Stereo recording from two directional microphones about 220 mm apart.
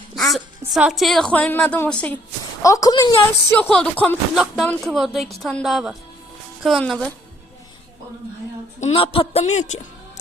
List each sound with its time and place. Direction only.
0.2 s a woman's voice: centre (ahead or behind)
8.8 s speech: 25° left (ahead or behind)